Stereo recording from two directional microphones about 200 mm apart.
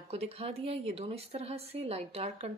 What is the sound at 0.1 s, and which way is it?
Speech, 30° right (ahead or behind).